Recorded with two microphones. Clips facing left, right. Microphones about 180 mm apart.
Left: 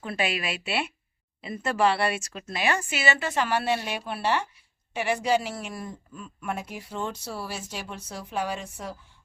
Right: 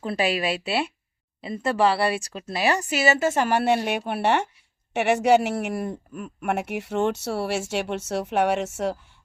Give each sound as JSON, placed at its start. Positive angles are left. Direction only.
{"t": 0.0, "sound": "a woman's voice", "side_deg": -35}